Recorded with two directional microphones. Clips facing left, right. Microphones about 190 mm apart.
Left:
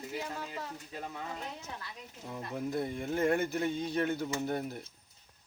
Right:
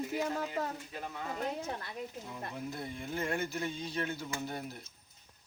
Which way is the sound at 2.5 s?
50° left (ahead or behind).